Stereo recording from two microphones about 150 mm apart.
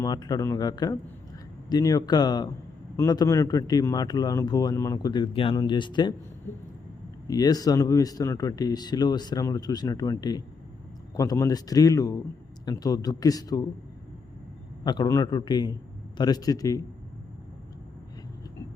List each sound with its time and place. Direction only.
0.0 s a man's voice: 25° left (ahead or behind)
7.3 s a man's voice: 25° left (ahead or behind)
14.8 s a man's voice: 25° left (ahead or behind)